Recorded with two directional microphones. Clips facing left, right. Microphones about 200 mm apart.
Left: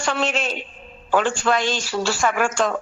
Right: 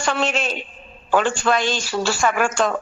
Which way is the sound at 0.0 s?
60° right (ahead or behind).